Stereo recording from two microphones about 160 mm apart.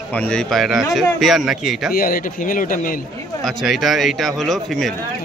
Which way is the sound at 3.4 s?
Centre (ahead or behind).